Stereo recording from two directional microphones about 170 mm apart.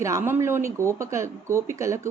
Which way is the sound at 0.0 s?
15° right (ahead or behind).